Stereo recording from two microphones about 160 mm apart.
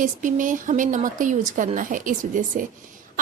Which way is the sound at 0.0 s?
55° right (ahead or behind).